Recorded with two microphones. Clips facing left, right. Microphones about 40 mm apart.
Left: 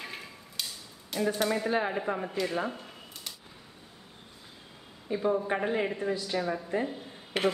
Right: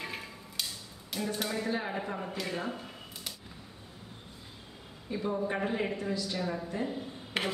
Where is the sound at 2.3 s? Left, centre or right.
Centre.